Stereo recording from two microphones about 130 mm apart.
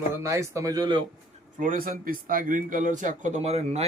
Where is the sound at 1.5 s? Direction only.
90° right.